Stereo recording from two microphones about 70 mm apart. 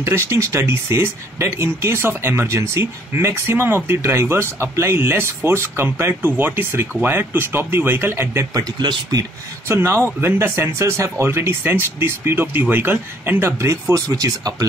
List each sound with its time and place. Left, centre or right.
0.0 s speech: right
8.5 s speech: right
9.7 s speech: right